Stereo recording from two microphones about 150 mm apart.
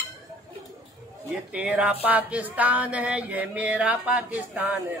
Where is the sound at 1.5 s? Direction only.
10° right (ahead or behind).